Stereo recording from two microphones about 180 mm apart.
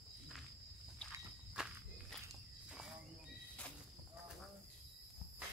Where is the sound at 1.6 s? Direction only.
5° right (ahead or behind).